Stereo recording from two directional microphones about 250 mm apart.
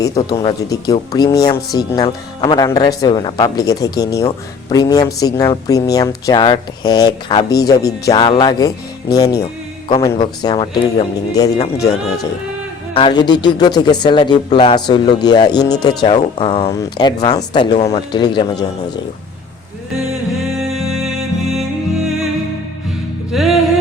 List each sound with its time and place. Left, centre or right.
0.0 s speech: centre
12.9 s speech: centre
20.6 s music: centre
23.3 s music: centre